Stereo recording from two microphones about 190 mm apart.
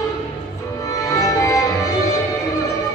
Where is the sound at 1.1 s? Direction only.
15° left (ahead or behind).